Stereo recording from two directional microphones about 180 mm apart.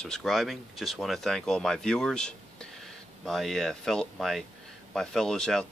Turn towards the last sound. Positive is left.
turn(degrees=5)  # may be behind; listen again after turning